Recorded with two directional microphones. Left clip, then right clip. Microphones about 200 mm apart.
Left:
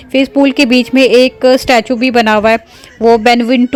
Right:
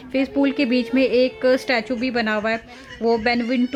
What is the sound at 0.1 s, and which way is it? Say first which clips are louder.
Speech: left 11 dB; 30° left (ahead or behind).